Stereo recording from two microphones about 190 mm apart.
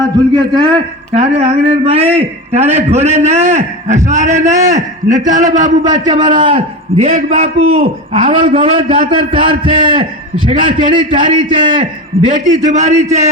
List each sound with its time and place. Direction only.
0.1 s a man's voice: 20° right (ahead or behind); by 5.7 s 40° right (ahead or behind)
5.8 s a man's voice: 20° right (ahead or behind)
7.0 s a man's voice: 40° right (ahead or behind)
11.4 s a man's voice: 45° right (ahead or behind)
11.7 s a man's voice: 25° right (ahead or behind)
12.5 s a man's voice: 40° right (ahead or behind)